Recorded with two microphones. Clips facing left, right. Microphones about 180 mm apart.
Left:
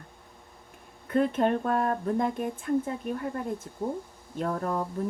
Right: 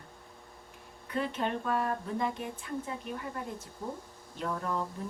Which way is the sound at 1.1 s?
50° left (ahead or behind).